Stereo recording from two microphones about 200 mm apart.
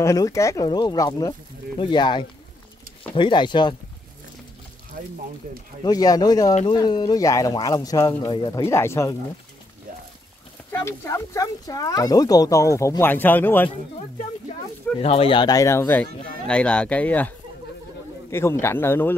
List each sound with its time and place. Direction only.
0.0 s speech: 15° left (ahead or behind)
5.9 s speech: 20° left (ahead or behind)
10.7 s speech: 15° left (ahead or behind)
15.0 s speech: 30° left (ahead or behind); by 17.3 s 5° left (ahead or behind)
18.3 s speech: 15° left (ahead or behind)